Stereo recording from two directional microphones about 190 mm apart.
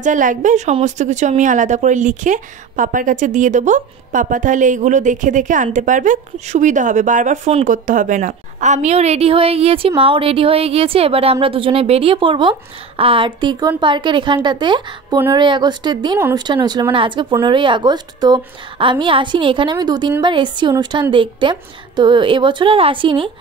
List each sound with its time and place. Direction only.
0.0 s a woman's voice: 40° right (ahead or behind); by 16.2 s 25° right (ahead or behind)
16.2 s speech: 10° right (ahead or behind)